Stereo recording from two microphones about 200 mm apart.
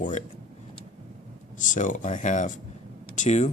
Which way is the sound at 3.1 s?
35° left (ahead or behind).